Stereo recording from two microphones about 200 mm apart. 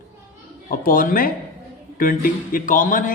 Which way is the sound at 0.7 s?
45° left (ahead or behind).